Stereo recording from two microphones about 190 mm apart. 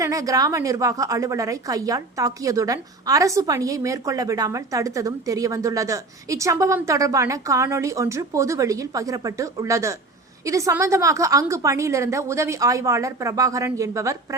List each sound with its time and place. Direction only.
0.0 s a woman's voice: 15° right (ahead or behind)